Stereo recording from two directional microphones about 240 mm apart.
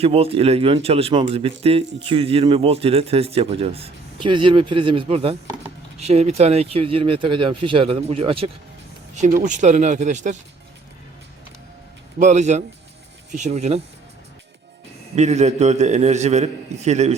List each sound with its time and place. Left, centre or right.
0.0 s speech: right
12.2 s speech: right
15.1 s speech: right